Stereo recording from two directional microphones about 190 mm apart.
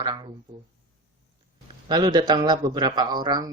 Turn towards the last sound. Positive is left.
turn(degrees=-20)  # may be behind; listen again after turning